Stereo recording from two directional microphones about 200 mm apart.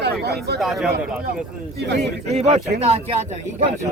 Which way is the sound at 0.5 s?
Centre (ahead or behind).